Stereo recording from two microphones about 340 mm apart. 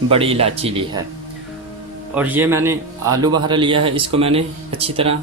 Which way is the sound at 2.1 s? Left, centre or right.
Centre.